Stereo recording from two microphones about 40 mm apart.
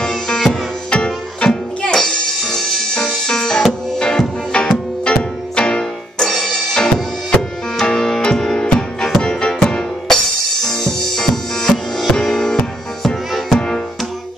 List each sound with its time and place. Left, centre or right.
0.0 s music: centre
2.0 s music: centre; by 5.9 s left
6.2 s music: centre
13.0 s music: centre